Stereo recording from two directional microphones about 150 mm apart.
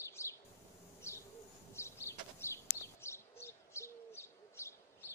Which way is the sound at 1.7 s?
20° left (ahead or behind).